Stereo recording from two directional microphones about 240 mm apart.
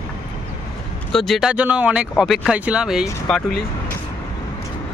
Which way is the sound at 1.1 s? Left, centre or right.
Centre.